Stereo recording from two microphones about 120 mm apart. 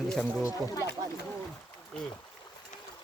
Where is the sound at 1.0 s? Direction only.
35° right (ahead or behind).